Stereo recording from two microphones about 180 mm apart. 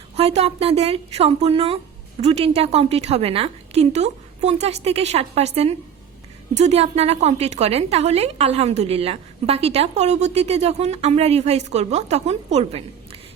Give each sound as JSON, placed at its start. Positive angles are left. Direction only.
{"t": 0.2, "sound": "a woman's voice", "side_deg": -35}